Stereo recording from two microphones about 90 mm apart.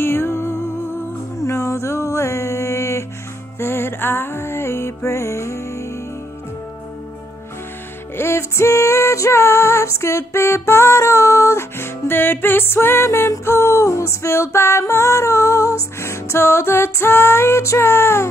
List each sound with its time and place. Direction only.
0.0 s music: 25° left (ahead or behind)
8.2 s music: 30° left (ahead or behind)